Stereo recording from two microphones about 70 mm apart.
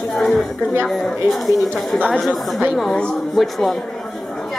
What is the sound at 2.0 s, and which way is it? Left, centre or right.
Speech, centre.